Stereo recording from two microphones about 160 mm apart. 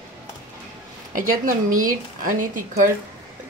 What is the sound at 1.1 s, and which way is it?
A woman's voice, 60° right (ahead or behind).